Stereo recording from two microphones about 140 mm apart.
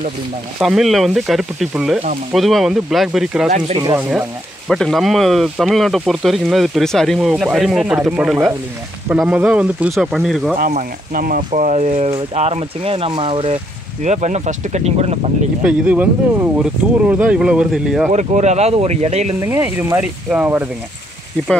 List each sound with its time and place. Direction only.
0.6 s speech: centre (ahead or behind)
3.4 s speech: 55° right (ahead or behind)
3.7 s speech: 30° right (ahead or behind)
4.6 s speech: centre (ahead or behind)
10.7 s speech: 70° right (ahead or behind); by 13.6 s 40° right (ahead or behind)
14.0 s speech: 55° right (ahead or behind)
15.6 s speech: 10° right (ahead or behind)
18.1 s speech: 55° right (ahead or behind)
19.4 s speech: 15° right (ahead or behind)